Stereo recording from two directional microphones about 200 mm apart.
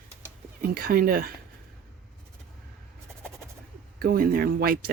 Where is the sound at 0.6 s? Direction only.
45° right (ahead or behind).